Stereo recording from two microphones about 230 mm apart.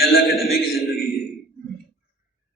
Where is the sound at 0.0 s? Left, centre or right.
Left.